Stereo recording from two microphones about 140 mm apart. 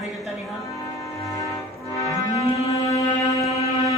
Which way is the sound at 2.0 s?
25° left (ahead or behind).